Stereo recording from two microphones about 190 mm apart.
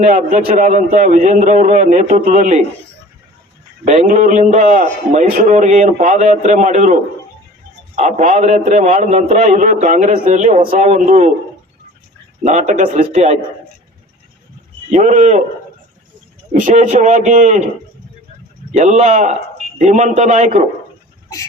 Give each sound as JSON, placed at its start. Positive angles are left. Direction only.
{"t": 0.0, "sound": "a man's voice", "side_deg": -45}
{"t": 3.8, "sound": "a man's voice", "side_deg": -40}
{"t": 12.4, "sound": "a man's voice", "side_deg": -40}
{"t": 14.9, "sound": "a man's voice", "side_deg": -40}
{"t": 16.5, "sound": "a man's voice", "side_deg": -40}
{"t": 18.8, "sound": "a man's voice", "side_deg": -35}